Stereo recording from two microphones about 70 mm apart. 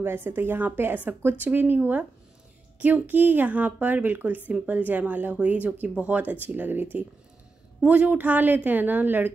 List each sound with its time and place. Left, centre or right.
0.0 s speech: right